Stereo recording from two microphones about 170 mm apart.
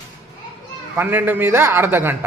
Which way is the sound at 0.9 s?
10° right (ahead or behind).